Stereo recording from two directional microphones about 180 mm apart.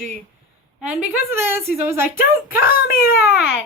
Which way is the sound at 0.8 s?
5° right (ahead or behind).